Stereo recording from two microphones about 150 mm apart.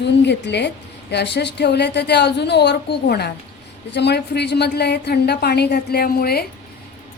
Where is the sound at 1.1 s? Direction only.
90° left.